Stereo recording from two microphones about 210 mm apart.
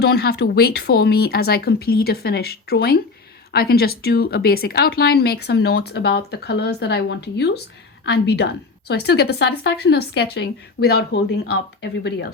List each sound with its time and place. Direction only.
0.0 s a woman's voice: 50° left (ahead or behind)